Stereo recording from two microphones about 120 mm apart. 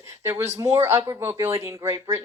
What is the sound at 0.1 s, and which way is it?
A woman's voice, 20° right (ahead or behind).